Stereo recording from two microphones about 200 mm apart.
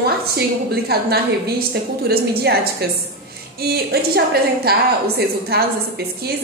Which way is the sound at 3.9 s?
50° right (ahead or behind).